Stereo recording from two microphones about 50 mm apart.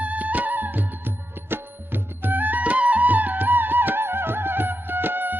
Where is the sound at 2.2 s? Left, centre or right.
Right.